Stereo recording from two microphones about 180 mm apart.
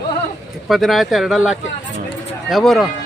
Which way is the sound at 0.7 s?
Centre (ahead or behind).